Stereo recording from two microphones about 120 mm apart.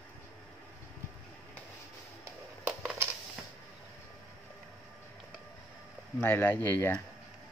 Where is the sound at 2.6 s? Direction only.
Centre (ahead or behind).